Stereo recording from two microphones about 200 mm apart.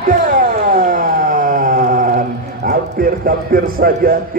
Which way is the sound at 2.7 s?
45° right (ahead or behind).